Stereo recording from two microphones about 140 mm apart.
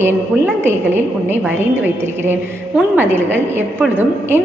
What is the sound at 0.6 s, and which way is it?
A woman's voice, 15° right (ahead or behind).